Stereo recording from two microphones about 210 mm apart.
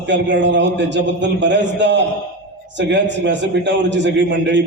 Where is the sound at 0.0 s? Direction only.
60° right (ahead or behind).